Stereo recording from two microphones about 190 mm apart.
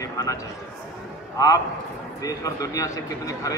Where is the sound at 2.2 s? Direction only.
20° left (ahead or behind).